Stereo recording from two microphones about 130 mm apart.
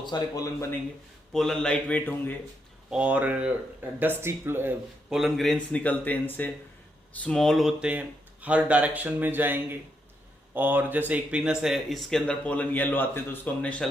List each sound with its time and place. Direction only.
0.0 s speech: 30° left (ahead or behind)
1.3 s speech: 5° left (ahead or behind)
2.9 s speech: 10° right (ahead or behind)
5.0 s speech: centre (ahead or behind)